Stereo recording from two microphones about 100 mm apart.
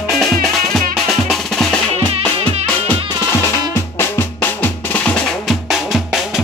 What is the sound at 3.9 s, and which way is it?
Drum, 20° left (ahead or behind).